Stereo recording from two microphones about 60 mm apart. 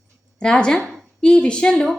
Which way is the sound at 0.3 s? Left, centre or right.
Centre.